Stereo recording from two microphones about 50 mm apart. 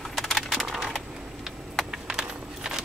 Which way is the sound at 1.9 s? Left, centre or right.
Centre.